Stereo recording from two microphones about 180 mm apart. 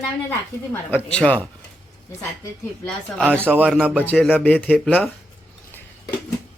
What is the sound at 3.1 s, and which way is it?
Speech, 5° left (ahead or behind).